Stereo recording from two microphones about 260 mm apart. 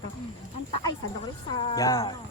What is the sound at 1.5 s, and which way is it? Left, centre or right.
Speech, left.